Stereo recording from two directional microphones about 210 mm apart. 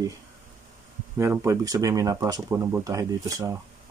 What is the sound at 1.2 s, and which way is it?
Speech, 15° right (ahead or behind).